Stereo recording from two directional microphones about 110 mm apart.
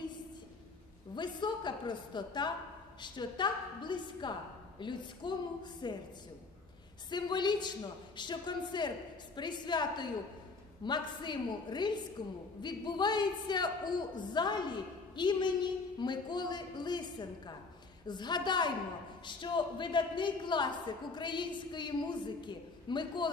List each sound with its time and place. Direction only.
1.1 s a woman's voice: 45° left (ahead or behind)
7.1 s a woman's voice: 40° left (ahead or behind)